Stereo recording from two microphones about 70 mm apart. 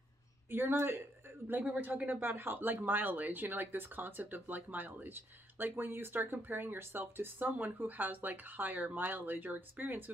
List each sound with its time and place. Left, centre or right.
0.5 s speech: right